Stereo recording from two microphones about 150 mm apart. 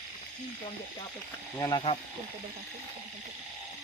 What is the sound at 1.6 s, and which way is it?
Speech, 25° left (ahead or behind).